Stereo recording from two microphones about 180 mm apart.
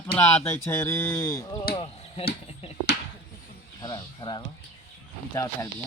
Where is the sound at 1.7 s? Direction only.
30° left (ahead or behind).